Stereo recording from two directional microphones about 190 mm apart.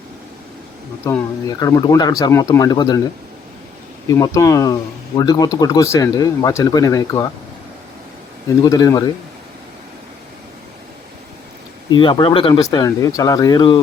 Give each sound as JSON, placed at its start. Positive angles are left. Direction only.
{"t": 1.0, "sound": "speech", "side_deg": 15}
{"t": 4.1, "sound": "speech", "side_deg": 15}
{"t": 8.6, "sound": "speech", "side_deg": 20}
{"t": 11.9, "sound": "speech", "side_deg": 25}